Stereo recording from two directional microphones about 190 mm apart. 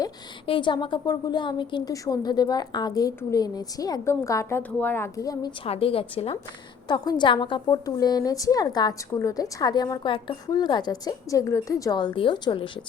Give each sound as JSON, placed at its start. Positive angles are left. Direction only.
{"t": 0.0, "sound": "a woman's voice", "side_deg": 25}
{"t": 5.6, "sound": "a woman's voice", "side_deg": 30}